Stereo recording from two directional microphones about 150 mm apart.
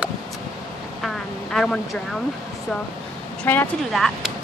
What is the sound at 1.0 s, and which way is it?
Speech, centre (ahead or behind).